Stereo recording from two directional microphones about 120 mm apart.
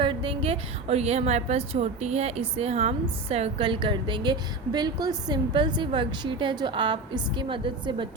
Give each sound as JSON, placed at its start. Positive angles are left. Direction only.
{"t": 0.0, "sound": "a woman's voice", "side_deg": -45}